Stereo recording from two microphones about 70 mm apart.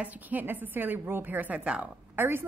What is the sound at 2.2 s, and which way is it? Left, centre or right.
Speech, right.